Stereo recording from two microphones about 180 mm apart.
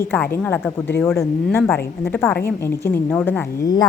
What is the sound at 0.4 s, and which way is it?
A woman's voice, 10° left (ahead or behind).